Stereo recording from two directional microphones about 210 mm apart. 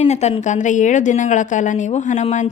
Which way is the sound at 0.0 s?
30° left (ahead or behind).